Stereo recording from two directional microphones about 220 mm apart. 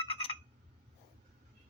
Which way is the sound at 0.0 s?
25° left (ahead or behind).